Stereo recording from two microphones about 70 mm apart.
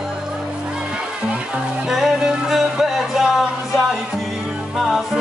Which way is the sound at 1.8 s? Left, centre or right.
Centre.